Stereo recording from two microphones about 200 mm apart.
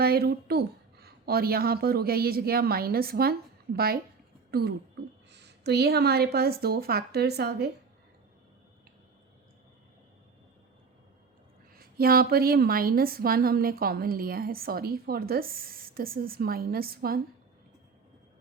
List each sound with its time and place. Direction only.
0.0 s a woman's voice: 50° right (ahead or behind)
11.8 s a woman's voice: 50° right (ahead or behind)